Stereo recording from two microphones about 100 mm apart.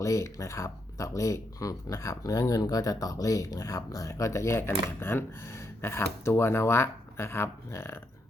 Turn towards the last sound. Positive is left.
turn(degrees=25)  # may be behind; listen again after turning